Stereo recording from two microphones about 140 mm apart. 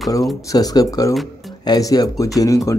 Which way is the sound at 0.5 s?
25° left (ahead or behind).